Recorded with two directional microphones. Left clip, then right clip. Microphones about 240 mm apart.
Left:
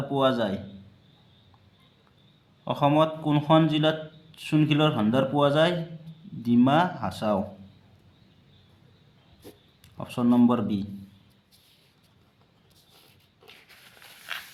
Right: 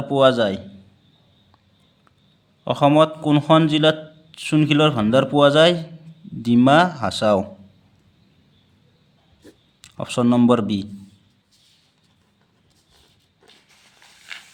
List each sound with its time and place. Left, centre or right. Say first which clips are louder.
0.1 s a man's voice: right 9 dB; right
2.6 s a man's voice: right 7 dB; right
9.8 s a man's voice: right 7 dB; right